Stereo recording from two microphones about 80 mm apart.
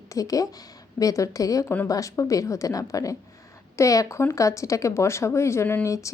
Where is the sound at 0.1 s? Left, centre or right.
Left.